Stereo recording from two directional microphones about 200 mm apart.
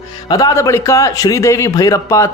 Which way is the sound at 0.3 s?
20° left (ahead or behind).